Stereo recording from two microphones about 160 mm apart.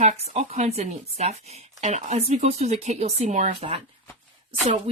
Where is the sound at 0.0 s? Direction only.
45° right (ahead or behind).